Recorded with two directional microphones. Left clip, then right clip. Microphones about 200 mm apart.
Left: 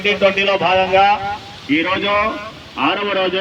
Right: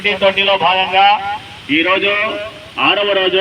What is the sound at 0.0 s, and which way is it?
A man's voice, 50° left (ahead or behind).